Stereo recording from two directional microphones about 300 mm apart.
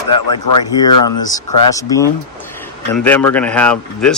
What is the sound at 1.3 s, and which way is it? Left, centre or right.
Speech, centre.